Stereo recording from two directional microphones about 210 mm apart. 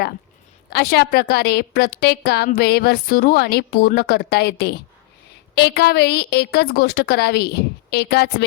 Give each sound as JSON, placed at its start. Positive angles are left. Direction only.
{"t": 0.7, "sound": "a woman's voice", "side_deg": 50}